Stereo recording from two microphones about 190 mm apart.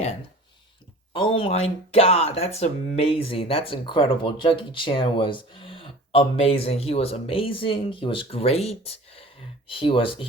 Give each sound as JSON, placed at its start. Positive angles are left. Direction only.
{"t": 1.1, "sound": "speech", "side_deg": 30}